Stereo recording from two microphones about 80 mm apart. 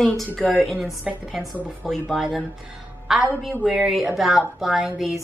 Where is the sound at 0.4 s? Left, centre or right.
Centre.